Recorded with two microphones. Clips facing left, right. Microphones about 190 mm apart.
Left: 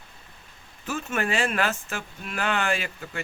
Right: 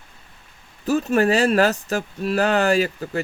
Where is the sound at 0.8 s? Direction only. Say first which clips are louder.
Right 10 dB; 35° right (ahead or behind).